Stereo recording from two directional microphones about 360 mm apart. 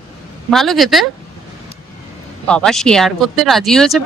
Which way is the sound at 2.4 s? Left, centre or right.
Centre.